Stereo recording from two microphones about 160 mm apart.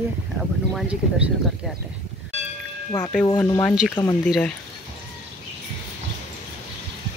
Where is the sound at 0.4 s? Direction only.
5° right (ahead or behind).